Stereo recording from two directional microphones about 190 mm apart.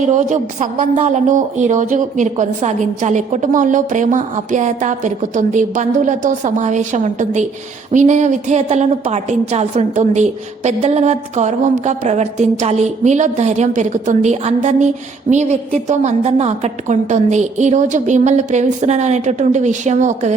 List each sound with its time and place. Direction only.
0.2 s a woman's voice: 40° right (ahead or behind)